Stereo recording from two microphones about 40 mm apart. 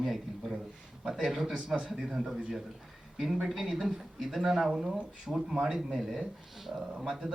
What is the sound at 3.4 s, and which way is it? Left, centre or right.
Speech, centre.